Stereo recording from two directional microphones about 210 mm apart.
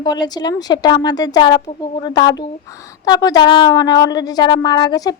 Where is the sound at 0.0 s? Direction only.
20° left (ahead or behind).